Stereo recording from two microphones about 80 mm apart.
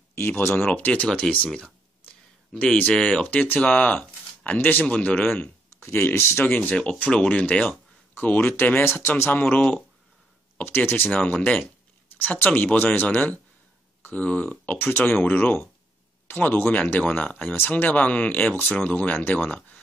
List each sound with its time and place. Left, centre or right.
0.4 s speech: left
0.7 s speech: centre
1.0 s speech: centre
2.6 s speech: centre; by 6.4 s left
6.4 s speech: centre
10.6 s speech: left